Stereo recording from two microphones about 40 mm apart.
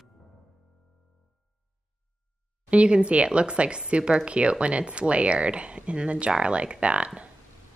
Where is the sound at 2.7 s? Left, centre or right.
Right.